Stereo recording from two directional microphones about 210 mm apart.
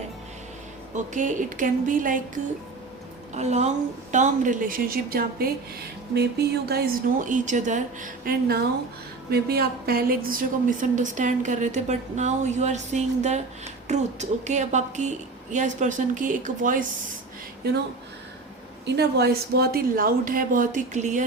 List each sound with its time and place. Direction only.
0.9 s a woman's voice: 35° right (ahead or behind)
3.3 s a woman's voice: 30° right (ahead or behind)
18.9 s a woman's voice: 50° right (ahead or behind); by 21.2 s 35° right (ahead or behind)